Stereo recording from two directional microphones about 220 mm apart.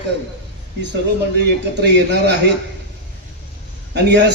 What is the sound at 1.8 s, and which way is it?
Speech, 50° right (ahead or behind).